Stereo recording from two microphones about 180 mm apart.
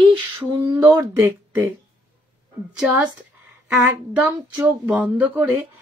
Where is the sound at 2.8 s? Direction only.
5° right (ahead or behind).